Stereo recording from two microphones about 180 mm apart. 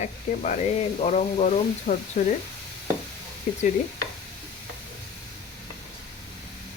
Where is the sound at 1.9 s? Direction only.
50° left (ahead or behind).